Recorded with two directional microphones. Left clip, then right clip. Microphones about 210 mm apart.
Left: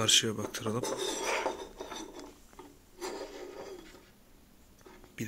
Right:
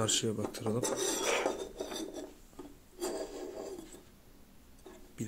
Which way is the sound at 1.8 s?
40° right (ahead or behind).